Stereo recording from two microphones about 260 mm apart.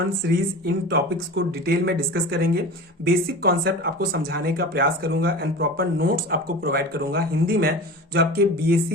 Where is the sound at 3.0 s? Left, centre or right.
Right.